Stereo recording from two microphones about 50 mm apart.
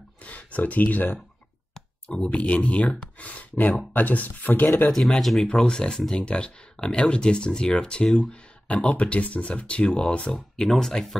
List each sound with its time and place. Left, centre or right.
0.2 s speech: left
2.2 s speech: left
4.8 s speech: centre
5.5 s speech: centre
10.3 s speech: centre